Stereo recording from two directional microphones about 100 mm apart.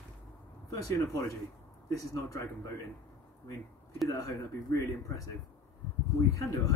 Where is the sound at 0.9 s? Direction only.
30° left (ahead or behind).